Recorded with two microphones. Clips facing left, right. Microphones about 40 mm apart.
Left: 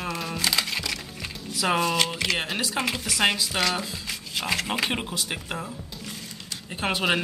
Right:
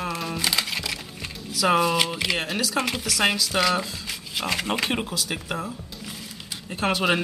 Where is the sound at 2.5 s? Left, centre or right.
Centre.